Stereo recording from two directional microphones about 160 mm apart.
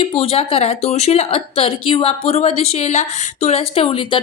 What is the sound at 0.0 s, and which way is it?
Speech, 35° left (ahead or behind).